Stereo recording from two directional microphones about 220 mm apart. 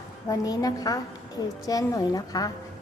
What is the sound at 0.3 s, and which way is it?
A woman's voice, 15° left (ahead or behind).